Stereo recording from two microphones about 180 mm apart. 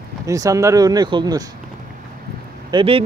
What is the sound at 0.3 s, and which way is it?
A man's voice, 15° right (ahead or behind).